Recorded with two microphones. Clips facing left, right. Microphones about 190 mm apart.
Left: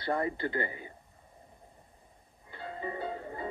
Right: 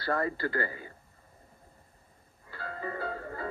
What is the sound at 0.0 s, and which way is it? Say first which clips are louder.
Speech: right 1 dB; 20° left (ahead or behind).